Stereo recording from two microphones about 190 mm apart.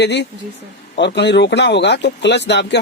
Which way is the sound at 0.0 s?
65° left (ahead or behind).